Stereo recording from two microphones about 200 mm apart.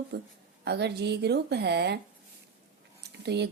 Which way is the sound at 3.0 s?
55° right (ahead or behind).